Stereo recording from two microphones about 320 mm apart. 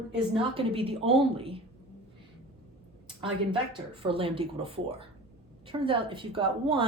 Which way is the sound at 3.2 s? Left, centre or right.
Centre.